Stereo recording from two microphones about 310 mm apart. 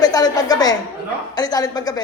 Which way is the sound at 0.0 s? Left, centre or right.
Centre.